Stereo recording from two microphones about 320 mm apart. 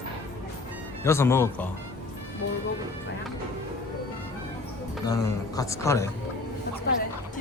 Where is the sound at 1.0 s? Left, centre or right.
Centre.